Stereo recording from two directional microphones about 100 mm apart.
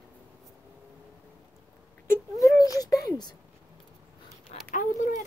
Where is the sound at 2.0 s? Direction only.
35° left (ahead or behind).